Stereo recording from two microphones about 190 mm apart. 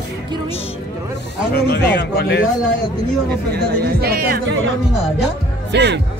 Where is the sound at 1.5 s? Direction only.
55° left (ahead or behind).